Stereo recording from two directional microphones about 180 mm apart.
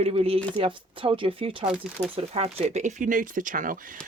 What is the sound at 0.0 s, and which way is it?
Speech, 35° right (ahead or behind).